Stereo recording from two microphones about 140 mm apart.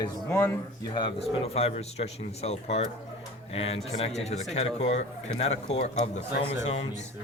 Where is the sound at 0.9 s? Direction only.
35° left (ahead or behind).